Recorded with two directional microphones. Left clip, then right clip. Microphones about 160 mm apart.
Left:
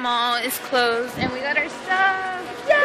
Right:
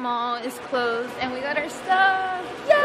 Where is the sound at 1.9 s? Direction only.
20° right (ahead or behind).